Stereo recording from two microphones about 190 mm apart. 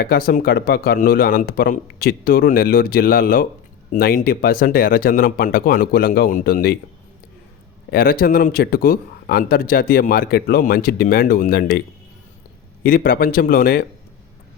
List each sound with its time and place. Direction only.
0.0 s speech: 50° left (ahead or behind)
7.9 s speech: 50° left (ahead or behind)
12.8 s speech: 50° left (ahead or behind)